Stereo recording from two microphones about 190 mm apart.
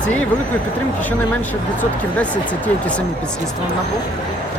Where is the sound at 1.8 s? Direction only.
10° left (ahead or behind).